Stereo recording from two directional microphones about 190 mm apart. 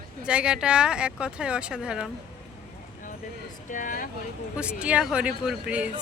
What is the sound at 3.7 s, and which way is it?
Speech, 45° left (ahead or behind).